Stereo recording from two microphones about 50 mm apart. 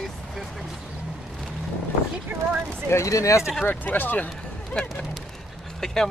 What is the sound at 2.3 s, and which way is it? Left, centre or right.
Speech, right.